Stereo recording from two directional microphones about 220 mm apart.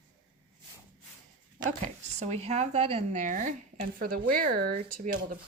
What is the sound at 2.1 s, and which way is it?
Speech, 30° right (ahead or behind).